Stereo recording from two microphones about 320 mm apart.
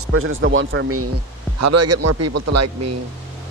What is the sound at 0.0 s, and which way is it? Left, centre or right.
Speech, right.